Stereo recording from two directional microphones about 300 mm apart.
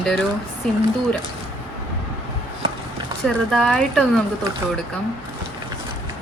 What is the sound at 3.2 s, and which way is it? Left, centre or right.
Speech, centre.